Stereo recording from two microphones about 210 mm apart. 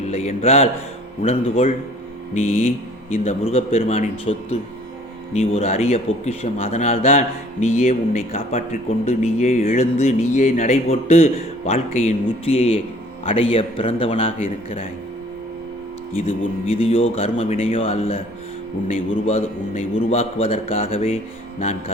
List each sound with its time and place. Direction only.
0.1 s a man's voice: 30° left (ahead or behind)
16.2 s a man's voice: 25° left (ahead or behind)